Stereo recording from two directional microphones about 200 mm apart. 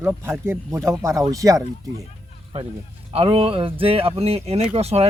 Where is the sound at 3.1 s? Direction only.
30° right (ahead or behind).